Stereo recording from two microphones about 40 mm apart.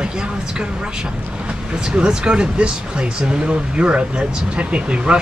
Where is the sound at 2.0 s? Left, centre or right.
Right.